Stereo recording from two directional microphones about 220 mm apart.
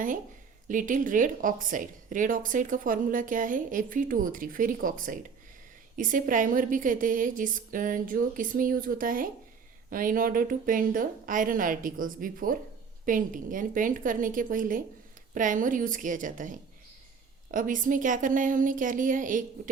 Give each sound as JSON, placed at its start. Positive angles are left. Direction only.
{"t": 0.7, "sound": "a woman's voice", "side_deg": -35}